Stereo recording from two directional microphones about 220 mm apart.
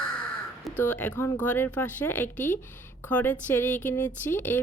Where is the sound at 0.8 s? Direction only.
10° left (ahead or behind).